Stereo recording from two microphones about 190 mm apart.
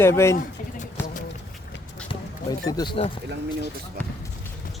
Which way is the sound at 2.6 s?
20° left (ahead or behind).